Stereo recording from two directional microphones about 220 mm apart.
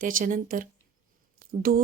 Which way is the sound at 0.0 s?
40° right (ahead or behind).